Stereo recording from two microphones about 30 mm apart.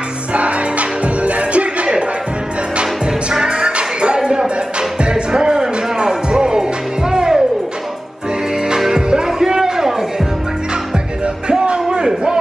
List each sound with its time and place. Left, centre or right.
0.3 s music: right
3.4 s music: right
8.7 s music: centre
9.1 s a sound: right
11.4 s music: right